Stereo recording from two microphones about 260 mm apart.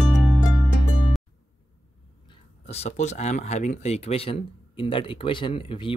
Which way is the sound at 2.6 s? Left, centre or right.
Left.